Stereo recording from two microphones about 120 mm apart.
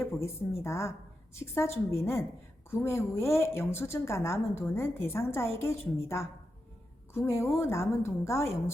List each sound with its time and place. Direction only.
0.0 s a woman's voice: 25° left (ahead or behind)